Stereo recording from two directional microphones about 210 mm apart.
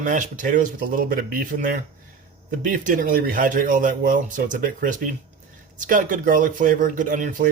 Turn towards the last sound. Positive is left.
turn(degrees=-40)  # may be behind; listen again after turning